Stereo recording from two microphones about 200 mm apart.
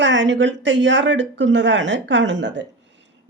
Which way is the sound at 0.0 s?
65° right (ahead or behind).